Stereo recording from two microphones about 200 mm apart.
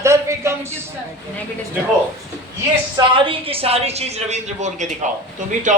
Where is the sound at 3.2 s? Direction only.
30° right (ahead or behind).